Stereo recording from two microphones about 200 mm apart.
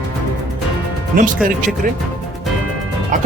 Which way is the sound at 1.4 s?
45° right (ahead or behind).